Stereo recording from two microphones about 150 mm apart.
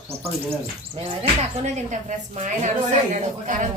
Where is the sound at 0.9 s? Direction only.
45° right (ahead or behind).